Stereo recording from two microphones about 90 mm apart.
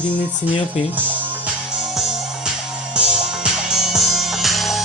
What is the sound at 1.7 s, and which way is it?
Music, 5° right (ahead or behind).